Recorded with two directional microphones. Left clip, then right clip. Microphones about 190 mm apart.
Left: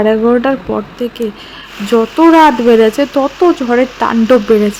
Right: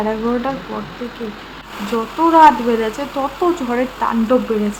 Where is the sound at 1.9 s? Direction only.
35° left (ahead or behind).